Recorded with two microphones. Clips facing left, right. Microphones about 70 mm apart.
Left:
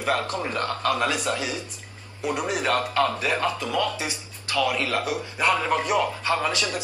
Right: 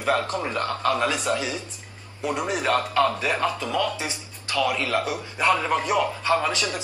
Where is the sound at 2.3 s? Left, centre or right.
Right.